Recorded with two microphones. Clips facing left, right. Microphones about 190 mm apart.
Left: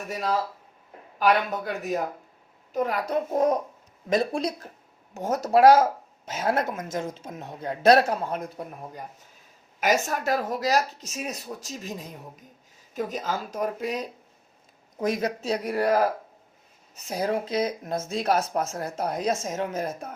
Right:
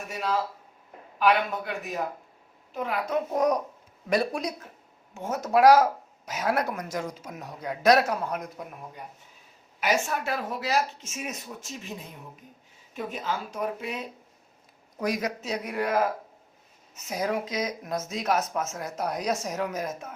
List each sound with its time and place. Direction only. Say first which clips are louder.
0.1 s speech: left 2 dB; 40° left (ahead or behind)
3.3 s speech: left 2 dB; 25° left (ahead or behind)
14.9 s speech: left 2 dB; 25° left (ahead or behind)